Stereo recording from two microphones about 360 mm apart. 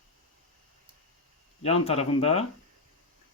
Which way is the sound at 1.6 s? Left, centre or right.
Centre.